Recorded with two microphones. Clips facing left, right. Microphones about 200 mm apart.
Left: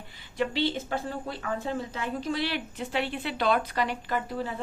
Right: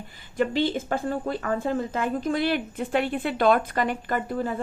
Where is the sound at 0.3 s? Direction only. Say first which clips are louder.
Right 4 dB; 50° right (ahead or behind).